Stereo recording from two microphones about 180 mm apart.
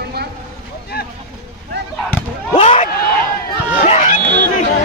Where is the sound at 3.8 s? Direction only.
40° left (ahead or behind).